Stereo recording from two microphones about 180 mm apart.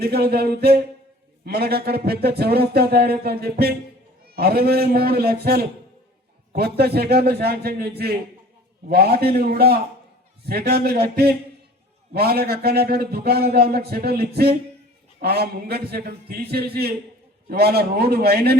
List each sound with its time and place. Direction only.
0.0 s a man's voice: 60° right (ahead or behind)
6.7 s a man's voice: 60° right (ahead or behind)